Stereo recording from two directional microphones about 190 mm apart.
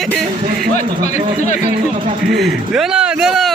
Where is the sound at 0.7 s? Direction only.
40° left (ahead or behind).